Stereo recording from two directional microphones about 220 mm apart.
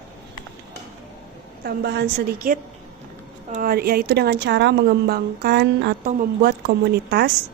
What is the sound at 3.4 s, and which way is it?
A woman's voice, 40° right (ahead or behind).